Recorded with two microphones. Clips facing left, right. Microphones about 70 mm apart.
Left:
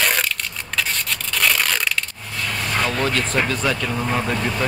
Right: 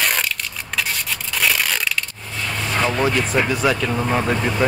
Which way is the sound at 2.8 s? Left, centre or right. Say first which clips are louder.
Right 3 dB; centre.